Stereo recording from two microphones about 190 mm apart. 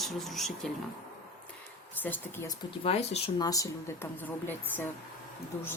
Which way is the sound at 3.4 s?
20° left (ahead or behind).